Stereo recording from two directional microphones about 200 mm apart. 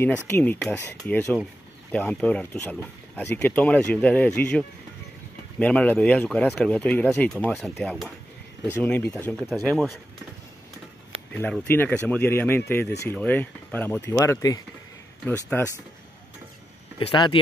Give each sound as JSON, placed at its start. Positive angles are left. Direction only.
{"t": 0.0, "sound": "speech", "side_deg": 10}
{"t": 11.6, "sound": "speech", "side_deg": 10}
{"t": 17.0, "sound": "speech", "side_deg": 25}